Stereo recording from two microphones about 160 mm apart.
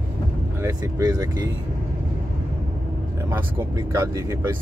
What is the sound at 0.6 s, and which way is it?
Speech, 20° right (ahead or behind).